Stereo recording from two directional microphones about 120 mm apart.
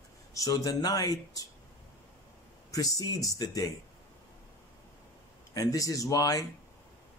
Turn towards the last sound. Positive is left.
turn(degrees=30)  # may be behind; listen again after turning